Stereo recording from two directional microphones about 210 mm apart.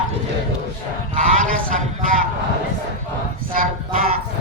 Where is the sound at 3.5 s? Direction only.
40° right (ahead or behind).